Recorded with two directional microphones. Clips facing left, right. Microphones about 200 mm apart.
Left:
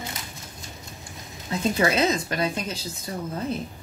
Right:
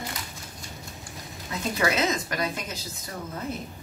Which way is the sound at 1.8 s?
20° left (ahead or behind).